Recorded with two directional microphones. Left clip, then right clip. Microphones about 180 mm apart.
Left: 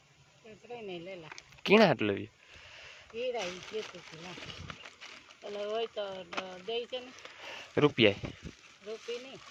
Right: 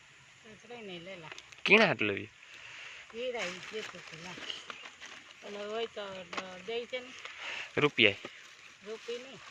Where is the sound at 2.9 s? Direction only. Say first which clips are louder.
Left 2 dB; 25° left (ahead or behind).